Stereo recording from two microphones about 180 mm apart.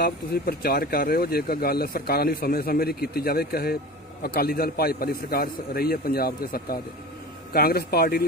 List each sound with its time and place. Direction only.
0.0 s speech: 60° left (ahead or behind)